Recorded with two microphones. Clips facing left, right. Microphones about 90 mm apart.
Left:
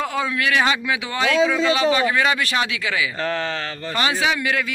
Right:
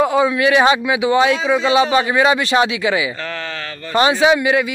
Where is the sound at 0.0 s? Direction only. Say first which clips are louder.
Right 8 dB; 20° right (ahead or behind).